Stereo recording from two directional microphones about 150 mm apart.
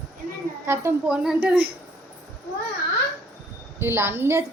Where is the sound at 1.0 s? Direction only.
5° right (ahead or behind).